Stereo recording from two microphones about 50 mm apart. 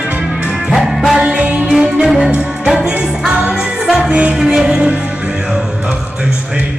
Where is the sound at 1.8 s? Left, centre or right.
Centre.